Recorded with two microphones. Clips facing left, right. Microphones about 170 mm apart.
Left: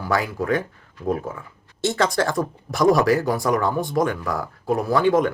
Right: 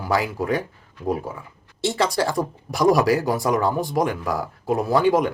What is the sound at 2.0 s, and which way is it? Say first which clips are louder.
Speech: even; 10° right (ahead or behind).